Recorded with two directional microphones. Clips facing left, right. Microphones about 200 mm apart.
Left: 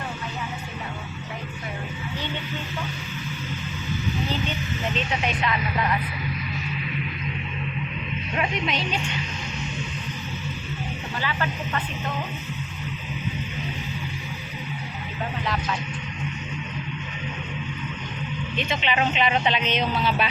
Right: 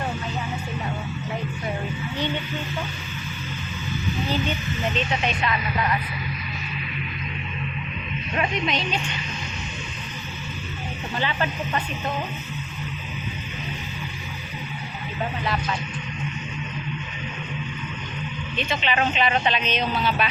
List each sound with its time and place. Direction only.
4.9 s speech: 10° left (ahead or behind)
8.4 s speech: 10° left (ahead or behind)
11.2 s speech: 25° right (ahead or behind)
18.5 s speech: 15° left (ahead or behind)